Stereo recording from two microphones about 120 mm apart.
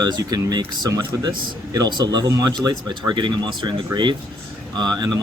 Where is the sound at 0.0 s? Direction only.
35° right (ahead or behind).